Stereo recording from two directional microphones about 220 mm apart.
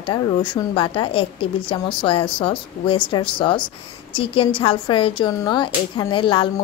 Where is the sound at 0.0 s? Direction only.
20° left (ahead or behind).